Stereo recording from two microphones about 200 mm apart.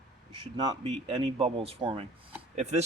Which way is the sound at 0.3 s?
25° right (ahead or behind).